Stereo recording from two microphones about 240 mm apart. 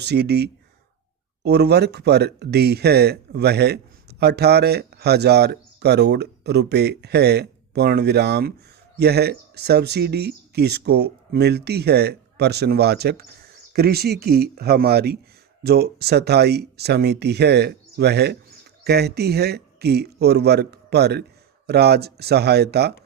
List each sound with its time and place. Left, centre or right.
0.0 s speech: right